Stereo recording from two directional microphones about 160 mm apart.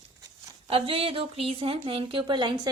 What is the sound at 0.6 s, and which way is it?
A woman's voice, 35° right (ahead or behind).